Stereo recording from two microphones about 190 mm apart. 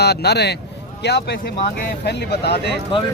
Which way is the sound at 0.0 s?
60° left (ahead or behind).